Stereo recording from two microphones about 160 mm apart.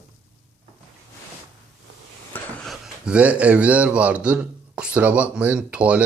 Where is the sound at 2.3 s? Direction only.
Centre (ahead or behind).